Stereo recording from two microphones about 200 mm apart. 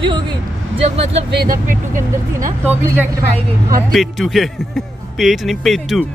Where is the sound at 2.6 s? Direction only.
10° right (ahead or behind).